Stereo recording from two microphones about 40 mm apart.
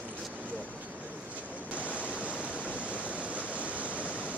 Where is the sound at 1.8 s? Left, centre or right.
Left.